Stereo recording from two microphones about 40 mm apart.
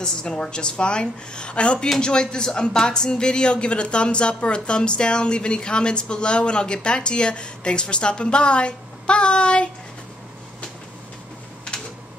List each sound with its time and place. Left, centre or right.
0.0 s speech: left